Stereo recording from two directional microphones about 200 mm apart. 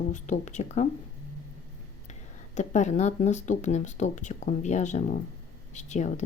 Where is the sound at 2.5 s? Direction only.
35° left (ahead or behind).